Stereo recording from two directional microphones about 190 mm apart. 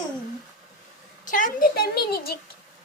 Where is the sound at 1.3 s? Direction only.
45° left (ahead or behind).